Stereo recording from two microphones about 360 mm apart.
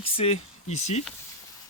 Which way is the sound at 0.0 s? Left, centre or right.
Centre.